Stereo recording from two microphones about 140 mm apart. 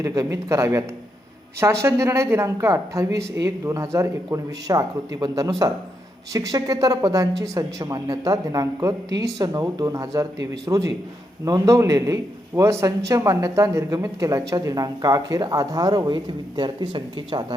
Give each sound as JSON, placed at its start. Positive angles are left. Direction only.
{"t": 0.0, "sound": "a man's voice", "side_deg": -20}